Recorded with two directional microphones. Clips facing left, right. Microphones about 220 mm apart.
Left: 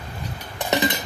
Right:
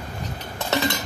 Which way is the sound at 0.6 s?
15° left (ahead or behind).